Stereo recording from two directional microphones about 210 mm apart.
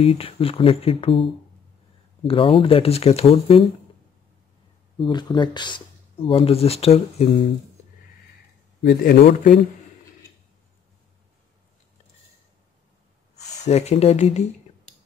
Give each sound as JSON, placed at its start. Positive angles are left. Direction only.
{"t": 0.0, "sound": "speech", "side_deg": 25}
{"t": 4.9, "sound": "speech", "side_deg": 20}
{"t": 8.8, "sound": "speech", "side_deg": 50}
{"t": 13.7, "sound": "speech", "side_deg": 30}